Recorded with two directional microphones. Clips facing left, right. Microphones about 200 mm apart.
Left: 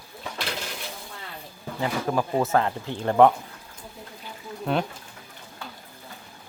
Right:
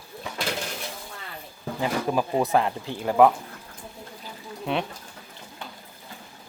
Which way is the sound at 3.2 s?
5° right (ahead or behind).